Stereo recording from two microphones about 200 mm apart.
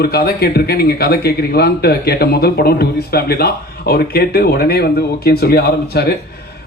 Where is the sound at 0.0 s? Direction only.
50° left (ahead or behind).